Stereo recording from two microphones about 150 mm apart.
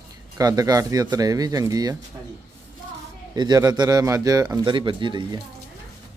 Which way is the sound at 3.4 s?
25° right (ahead or behind).